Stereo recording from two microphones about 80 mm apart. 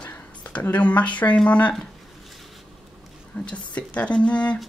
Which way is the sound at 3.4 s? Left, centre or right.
Centre.